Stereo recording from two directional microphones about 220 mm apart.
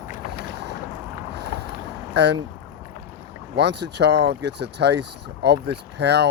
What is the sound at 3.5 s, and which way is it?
Speech, 50° right (ahead or behind).